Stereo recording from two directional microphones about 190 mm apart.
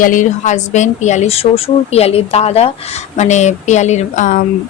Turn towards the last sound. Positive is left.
turn(degrees=40)  # may be behind; listen again after turning